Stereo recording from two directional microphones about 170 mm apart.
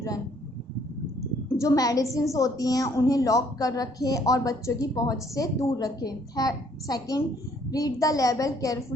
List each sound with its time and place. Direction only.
1.5 s a woman's voice: 20° left (ahead or behind)